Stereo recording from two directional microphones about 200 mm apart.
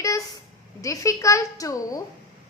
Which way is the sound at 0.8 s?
15° left (ahead or behind).